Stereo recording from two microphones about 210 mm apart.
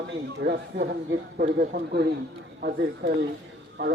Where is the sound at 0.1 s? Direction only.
55° right (ahead or behind).